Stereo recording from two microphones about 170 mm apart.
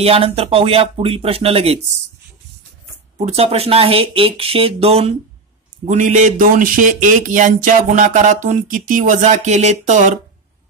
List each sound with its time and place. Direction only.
0.0 s speech: 35° right (ahead or behind)
3.2 s speech: 35° right (ahead or behind)
5.9 s speech: 45° right (ahead or behind)